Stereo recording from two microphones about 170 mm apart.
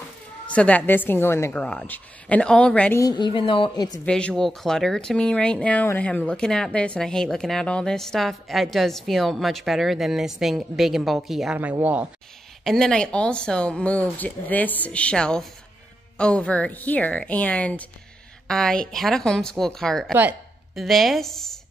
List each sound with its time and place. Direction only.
0.5 s a woman's voice: 10° left (ahead or behind)
3.0 s a woman's voice: 25° left (ahead or behind)
4.0 s speech: 5° left (ahead or behind); by 12.1 s 10° right (ahead or behind)
12.6 s a woman's voice: 5° left (ahead or behind)